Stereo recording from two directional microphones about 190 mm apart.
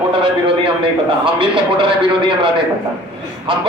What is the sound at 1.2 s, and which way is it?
Speech, 25° right (ahead or behind).